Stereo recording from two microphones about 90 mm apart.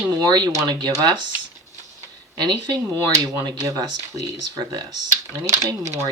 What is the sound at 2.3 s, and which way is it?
Speech, 55° right (ahead or behind).